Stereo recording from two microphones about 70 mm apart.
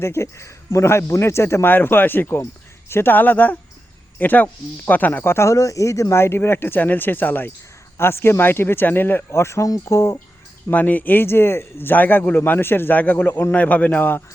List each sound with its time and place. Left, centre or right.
0.0 s a man's voice: left
5.3 s speech: left
9.6 s speech: left
9.9 s speech: left
10.7 s a man's voice: left